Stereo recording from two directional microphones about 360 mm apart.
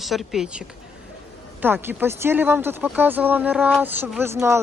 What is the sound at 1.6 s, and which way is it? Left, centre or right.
Speech, centre.